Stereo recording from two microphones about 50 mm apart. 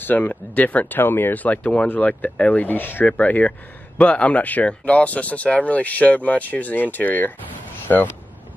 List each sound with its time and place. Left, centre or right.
0.0 s speech: left